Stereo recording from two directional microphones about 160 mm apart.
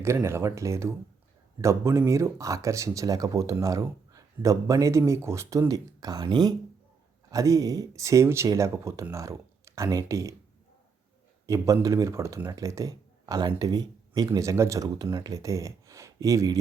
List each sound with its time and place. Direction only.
0.0 s speech: 15° right (ahead or behind)
11.4 s speech: 20° right (ahead or behind)